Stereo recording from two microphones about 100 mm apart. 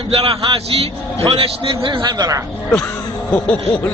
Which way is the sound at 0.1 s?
65° right (ahead or behind).